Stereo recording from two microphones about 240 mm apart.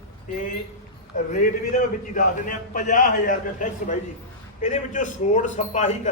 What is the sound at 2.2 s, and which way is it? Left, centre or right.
A man's voice, left.